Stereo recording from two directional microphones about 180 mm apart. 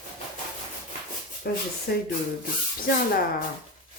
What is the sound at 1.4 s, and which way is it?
Speech, 60° left (ahead or behind).